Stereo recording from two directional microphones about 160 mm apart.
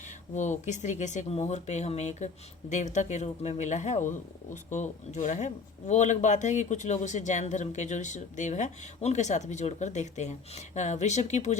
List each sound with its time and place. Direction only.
0.3 s speech: 50° left (ahead or behind)